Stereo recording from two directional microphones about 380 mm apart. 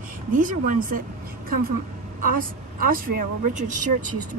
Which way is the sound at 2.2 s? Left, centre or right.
Right.